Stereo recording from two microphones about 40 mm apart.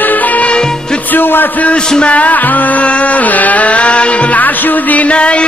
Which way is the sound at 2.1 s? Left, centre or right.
Left.